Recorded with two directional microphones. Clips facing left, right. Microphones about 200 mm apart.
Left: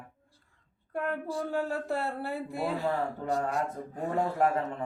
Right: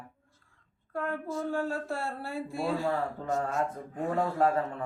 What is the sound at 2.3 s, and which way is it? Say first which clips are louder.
Speech: even; 60° left (ahead or behind).